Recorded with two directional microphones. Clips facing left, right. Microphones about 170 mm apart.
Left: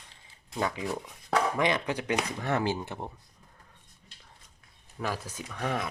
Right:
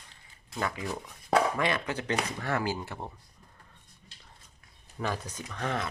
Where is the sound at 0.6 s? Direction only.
20° left (ahead or behind).